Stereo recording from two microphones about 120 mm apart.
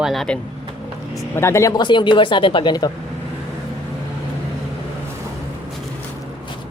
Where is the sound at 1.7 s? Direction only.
40° left (ahead or behind).